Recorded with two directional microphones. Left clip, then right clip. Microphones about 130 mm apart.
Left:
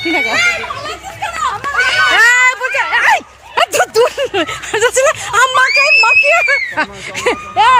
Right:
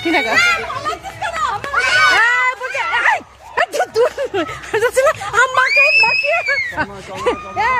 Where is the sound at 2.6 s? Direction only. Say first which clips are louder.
Left 4 dB; 45° left (ahead or behind).